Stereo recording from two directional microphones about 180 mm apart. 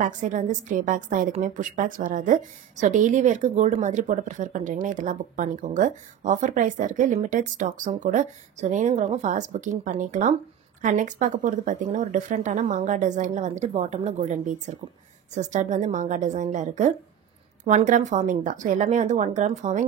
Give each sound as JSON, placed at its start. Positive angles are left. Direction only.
{"t": 0.0, "sound": "a woman's voice", "side_deg": -45}